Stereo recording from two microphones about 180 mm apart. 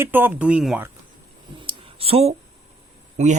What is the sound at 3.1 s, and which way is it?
Speech, 40° right (ahead or behind).